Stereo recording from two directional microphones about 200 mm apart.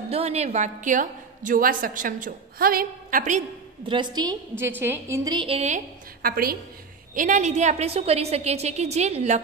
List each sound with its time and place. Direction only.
0.1 s a woman's voice: 30° right (ahead or behind)
3.9 s a woman's voice: 20° right (ahead or behind)
6.2 s a woman's voice: 45° right (ahead or behind)